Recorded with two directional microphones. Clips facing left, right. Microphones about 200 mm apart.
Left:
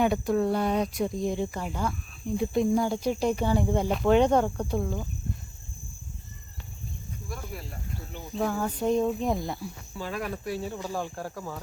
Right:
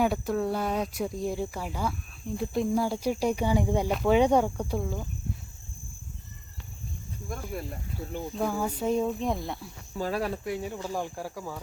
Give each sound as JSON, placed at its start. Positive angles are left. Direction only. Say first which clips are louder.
{"t": 0.0, "sound": "speech", "louder": "left 2 dB", "side_deg": -5}
{"t": 8.4, "sound": "speech", "louder": "left 2 dB", "side_deg": -10}
{"t": 10.0, "sound": "cricket", "louder": "right 3 dB", "side_deg": -35}
{"t": 10.8, "sound": "speech", "louder": "even", "side_deg": -15}